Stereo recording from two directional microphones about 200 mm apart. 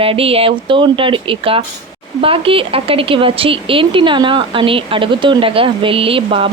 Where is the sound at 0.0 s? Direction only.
30° right (ahead or behind).